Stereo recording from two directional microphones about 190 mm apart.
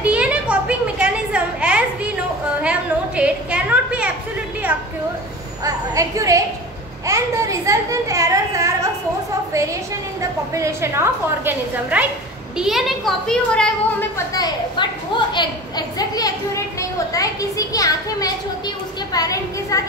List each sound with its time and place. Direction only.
0.0 s a sound: 5° right (ahead or behind)
5.6 s a woman's voice: 15° right (ahead or behind)
10.5 s a woman's voice: 15° right (ahead or behind); by 19.8 s 20° left (ahead or behind)